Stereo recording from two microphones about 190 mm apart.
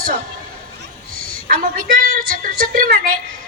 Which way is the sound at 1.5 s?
50° right (ahead or behind).